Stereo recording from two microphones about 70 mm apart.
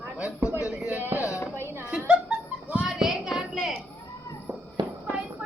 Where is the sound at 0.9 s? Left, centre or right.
Right.